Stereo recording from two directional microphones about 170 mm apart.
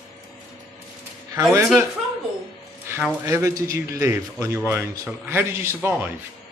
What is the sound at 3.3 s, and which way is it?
A man's voice, 15° right (ahead or behind).